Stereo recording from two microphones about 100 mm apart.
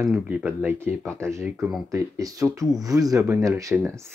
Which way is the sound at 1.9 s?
35° right (ahead or behind).